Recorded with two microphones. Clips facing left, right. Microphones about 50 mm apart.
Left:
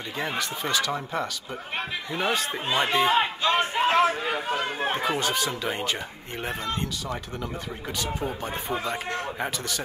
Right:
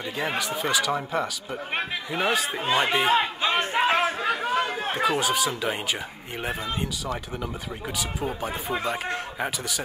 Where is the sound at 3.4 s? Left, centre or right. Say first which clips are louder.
Left 1 dB; right.